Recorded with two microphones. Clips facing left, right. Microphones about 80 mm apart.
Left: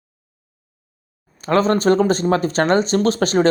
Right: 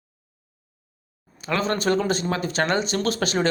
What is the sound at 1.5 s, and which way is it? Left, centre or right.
Speech, left.